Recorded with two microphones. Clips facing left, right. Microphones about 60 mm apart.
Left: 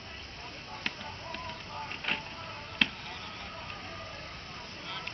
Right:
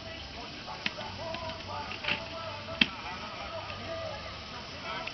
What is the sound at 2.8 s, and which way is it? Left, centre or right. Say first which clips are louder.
Chop: even; centre.